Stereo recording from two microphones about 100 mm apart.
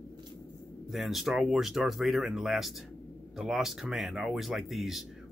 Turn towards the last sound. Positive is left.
turn(degrees=0)  # may be behind; listen again after turning